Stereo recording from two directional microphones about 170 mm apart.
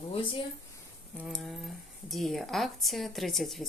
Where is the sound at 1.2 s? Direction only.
Centre (ahead or behind).